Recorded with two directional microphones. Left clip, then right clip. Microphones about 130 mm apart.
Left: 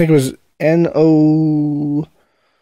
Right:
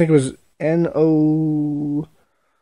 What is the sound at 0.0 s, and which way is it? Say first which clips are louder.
Speech: left 3 dB; 35° left (ahead or behind).